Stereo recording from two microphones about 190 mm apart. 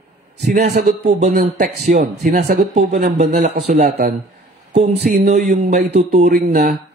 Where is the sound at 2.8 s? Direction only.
60° right (ahead or behind).